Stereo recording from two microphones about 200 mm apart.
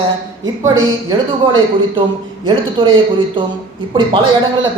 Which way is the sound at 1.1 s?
25° right (ahead or behind).